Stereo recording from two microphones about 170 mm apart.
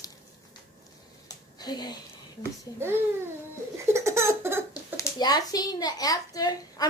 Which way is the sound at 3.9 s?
15° right (ahead or behind).